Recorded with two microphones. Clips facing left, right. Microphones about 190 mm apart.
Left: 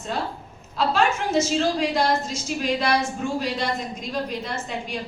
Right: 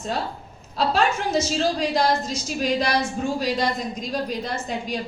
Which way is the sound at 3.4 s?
40° right (ahead or behind).